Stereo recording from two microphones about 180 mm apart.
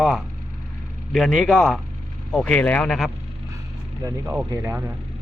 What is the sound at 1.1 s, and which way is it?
Speech, centre (ahead or behind).